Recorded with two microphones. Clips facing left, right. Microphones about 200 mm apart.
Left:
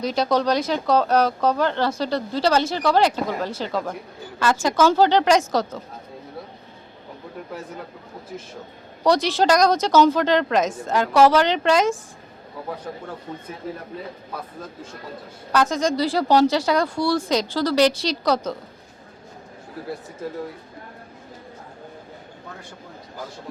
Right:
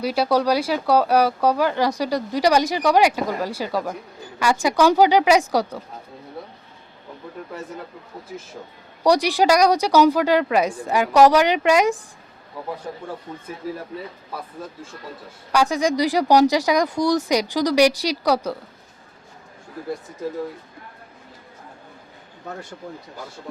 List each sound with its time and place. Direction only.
0.0 s speech: 10° right (ahead or behind)
9.0 s speech: 15° right (ahead or behind)
15.5 s speech: 15° right (ahead or behind)